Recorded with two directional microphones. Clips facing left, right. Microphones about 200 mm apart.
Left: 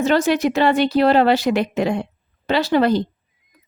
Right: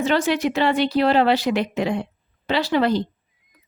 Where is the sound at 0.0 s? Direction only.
45° left (ahead or behind).